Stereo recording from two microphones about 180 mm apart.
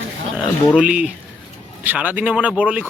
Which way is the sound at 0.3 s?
5° right (ahead or behind).